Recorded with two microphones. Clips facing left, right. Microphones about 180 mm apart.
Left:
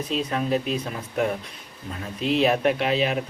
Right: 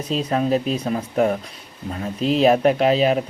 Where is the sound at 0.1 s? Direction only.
40° right (ahead or behind).